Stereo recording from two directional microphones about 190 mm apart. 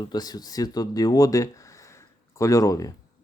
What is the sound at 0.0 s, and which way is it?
Speech, 20° left (ahead or behind).